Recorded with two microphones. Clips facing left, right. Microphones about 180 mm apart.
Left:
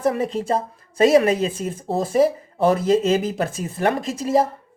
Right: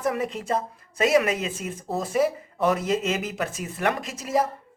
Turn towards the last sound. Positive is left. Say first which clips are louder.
# left 6 dB
turn(degrees=30)  # may be behind; listen again after turning